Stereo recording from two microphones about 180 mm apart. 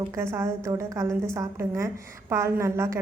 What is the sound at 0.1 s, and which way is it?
A woman's voice, 15° right (ahead or behind).